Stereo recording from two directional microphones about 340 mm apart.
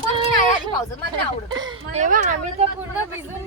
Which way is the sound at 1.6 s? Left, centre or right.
Centre.